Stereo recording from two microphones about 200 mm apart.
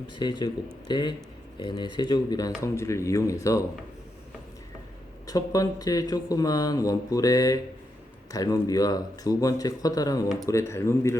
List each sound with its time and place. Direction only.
0.2 s speech: 20° left (ahead or behind)
5.2 s speech: 20° left (ahead or behind)